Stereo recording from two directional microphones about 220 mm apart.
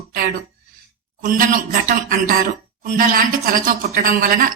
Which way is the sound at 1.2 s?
40° right (ahead or behind).